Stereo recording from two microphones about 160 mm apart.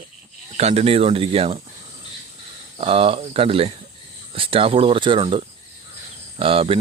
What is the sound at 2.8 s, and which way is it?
Speech, 35° right (ahead or behind).